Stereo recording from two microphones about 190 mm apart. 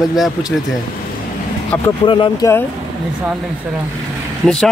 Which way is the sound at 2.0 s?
25° left (ahead or behind).